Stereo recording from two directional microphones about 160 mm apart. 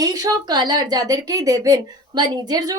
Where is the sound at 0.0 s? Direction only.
20° right (ahead or behind).